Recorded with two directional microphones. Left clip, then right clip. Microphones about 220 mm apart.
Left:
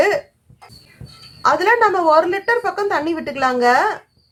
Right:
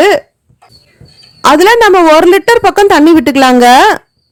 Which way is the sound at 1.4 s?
50° right (ahead or behind).